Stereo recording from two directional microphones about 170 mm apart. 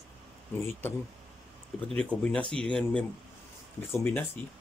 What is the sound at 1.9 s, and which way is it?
Speech, 5° left (ahead or behind).